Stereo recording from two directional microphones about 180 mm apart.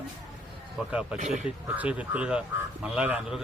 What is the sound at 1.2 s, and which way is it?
Speech, 40° right (ahead or behind).